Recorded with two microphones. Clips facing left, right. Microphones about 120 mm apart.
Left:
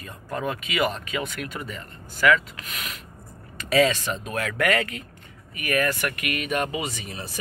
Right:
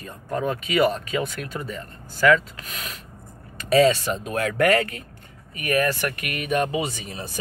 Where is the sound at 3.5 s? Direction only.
30° right (ahead or behind).